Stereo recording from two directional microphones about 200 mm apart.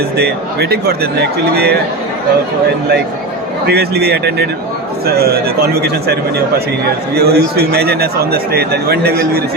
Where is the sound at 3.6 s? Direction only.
55° right (ahead or behind).